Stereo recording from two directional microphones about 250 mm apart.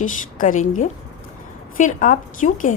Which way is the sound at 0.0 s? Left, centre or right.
Left.